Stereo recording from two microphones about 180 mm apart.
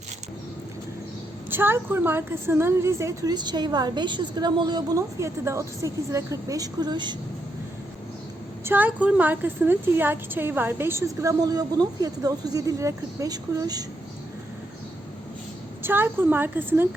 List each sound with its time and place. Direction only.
1.5 s a woman's voice: 10° right (ahead or behind)
8.6 s a woman's voice: 10° right (ahead or behind)
15.8 s a woman's voice: 10° right (ahead or behind)